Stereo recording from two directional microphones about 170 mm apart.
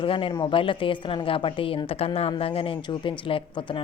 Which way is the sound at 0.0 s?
30° left (ahead or behind).